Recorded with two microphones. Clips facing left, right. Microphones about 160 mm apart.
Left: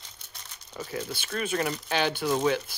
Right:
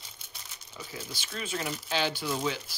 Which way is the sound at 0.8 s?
55° left (ahead or behind).